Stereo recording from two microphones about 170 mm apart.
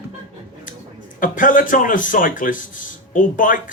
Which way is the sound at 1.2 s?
50° left (ahead or behind).